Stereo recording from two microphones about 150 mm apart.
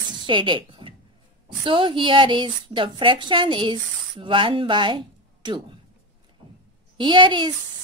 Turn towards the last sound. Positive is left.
turn(degrees=-30)  # may be behind; listen again after turning